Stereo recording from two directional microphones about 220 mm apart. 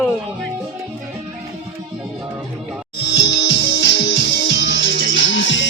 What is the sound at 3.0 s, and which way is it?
Music, 55° left (ahead or behind).